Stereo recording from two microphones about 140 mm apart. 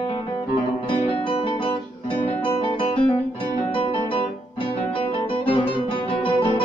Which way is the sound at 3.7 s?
40° left (ahead or behind).